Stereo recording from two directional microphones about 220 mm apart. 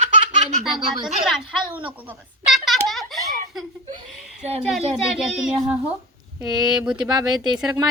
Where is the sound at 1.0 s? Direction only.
Centre (ahead or behind).